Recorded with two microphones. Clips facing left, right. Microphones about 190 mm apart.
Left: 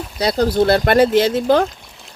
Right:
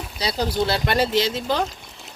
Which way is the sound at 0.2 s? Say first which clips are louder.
Left 8 dB; 55° left (ahead or behind).